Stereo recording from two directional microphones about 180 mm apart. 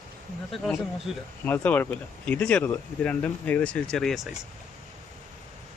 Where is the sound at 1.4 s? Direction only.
10° left (ahead or behind).